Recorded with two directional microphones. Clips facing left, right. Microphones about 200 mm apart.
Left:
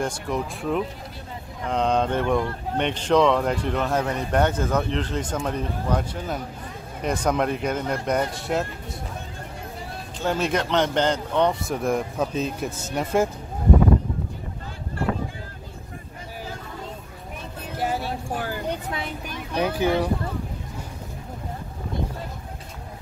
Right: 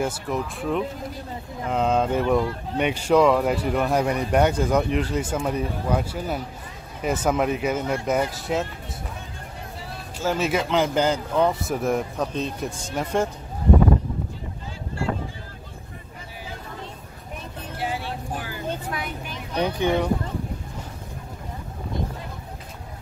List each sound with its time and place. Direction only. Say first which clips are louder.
0.0 s speech: right 1 dB; 5° right (ahead or behind)
10.2 s speech: even; centre (ahead or behind)
17.7 s vehicle: left 3 dB; 40° left (ahead or behind)
18.7 s vehicle: left 1 dB; 25° left (ahead or behind)
19.5 s a sound: even; 5° left (ahead or behind)